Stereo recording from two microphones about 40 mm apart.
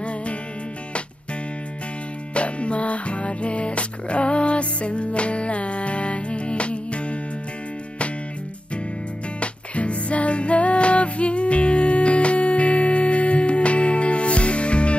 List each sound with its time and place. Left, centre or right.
0.0 s music: left
2.3 s music: left
9.4 s music: left